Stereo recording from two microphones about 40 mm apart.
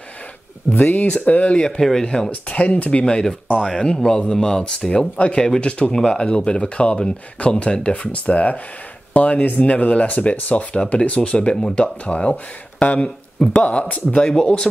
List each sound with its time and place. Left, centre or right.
0.7 s speech: left
1.0 s speech: left
1.8 s speech: centre
2.4 s speech: left
5.9 s speech: centre; by 14.0 s left
14.1 s speech: left